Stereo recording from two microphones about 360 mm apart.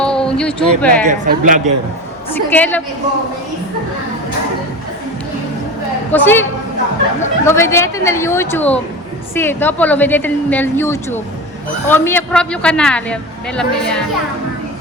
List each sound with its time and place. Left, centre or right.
0.0 s a sound: centre
1.0 s speech: right
2.3 s a woman's voice: centre
6.1 s a woman's voice: centre